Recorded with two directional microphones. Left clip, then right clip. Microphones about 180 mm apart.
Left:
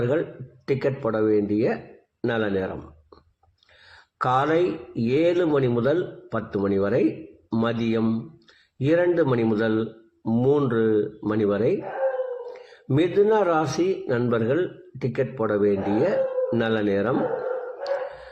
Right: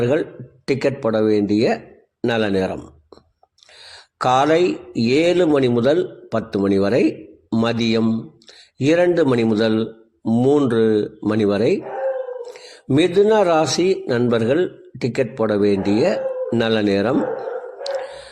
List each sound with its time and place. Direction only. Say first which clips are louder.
0.0 s a man's voice: right 5 dB; 40° right (ahead or behind)
3.9 s a man's voice: right 6 dB; 40° right (ahead or behind)
12.9 s a man's voice: right 5 dB; 40° right (ahead or behind)